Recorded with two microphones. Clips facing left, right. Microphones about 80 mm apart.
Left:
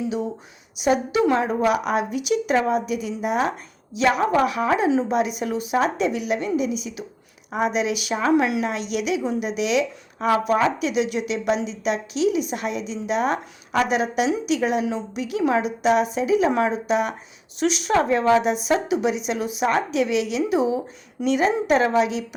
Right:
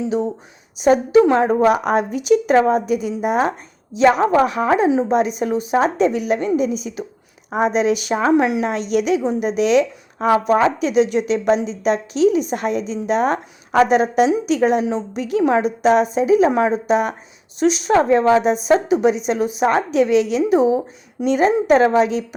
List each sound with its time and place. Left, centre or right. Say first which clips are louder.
0.0 s speech: right 5 dB; right
4.9 s a woman's voice: right 3 dB; centre
5.1 s speech: right 5 dB; right
8.7 s speech: right 6 dB; right